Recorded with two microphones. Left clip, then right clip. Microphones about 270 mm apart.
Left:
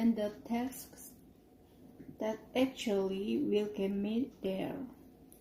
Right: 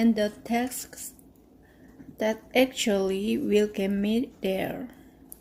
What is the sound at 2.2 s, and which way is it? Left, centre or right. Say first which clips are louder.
Speech: right 10 dB; right.